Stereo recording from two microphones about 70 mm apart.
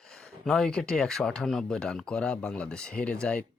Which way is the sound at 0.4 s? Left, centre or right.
Centre.